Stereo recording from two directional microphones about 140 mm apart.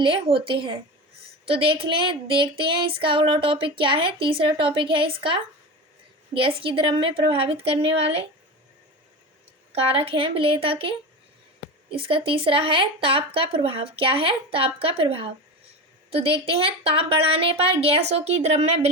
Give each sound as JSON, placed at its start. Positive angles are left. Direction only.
{"t": 0.0, "sound": "speech", "side_deg": -40}
{"t": 9.9, "sound": "speech", "side_deg": -40}